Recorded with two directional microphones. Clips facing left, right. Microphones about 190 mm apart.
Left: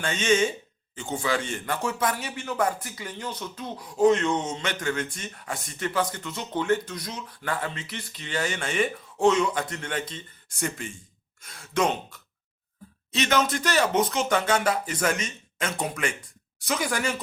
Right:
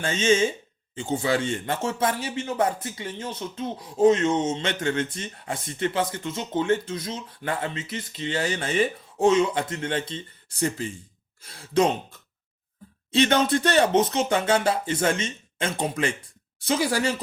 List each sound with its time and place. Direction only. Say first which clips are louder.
0.0 s speech: right 2 dB; 30° right (ahead or behind)